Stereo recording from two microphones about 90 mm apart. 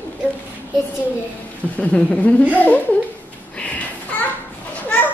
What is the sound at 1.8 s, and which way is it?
Speech, 15° left (ahead or behind).